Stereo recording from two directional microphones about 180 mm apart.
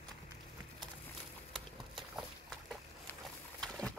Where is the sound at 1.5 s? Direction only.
Centre (ahead or behind).